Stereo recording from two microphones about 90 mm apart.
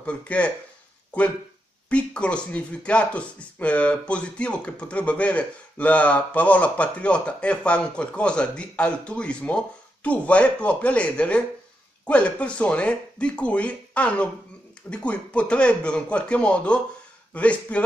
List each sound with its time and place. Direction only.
0.0 s speech: 15° left (ahead or behind)
1.9 s speech: 10° left (ahead or behind)